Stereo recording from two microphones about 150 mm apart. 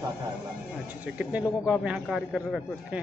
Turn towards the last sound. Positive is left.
turn(degrees=0)  # may be behind; listen again after turning